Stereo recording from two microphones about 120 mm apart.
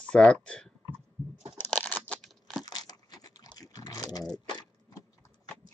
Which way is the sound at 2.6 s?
30° left (ahead or behind).